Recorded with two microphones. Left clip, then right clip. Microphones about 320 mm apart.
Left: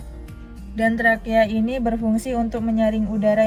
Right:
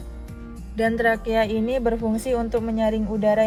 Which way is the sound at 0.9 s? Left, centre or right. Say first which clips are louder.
Left 2 dB; centre.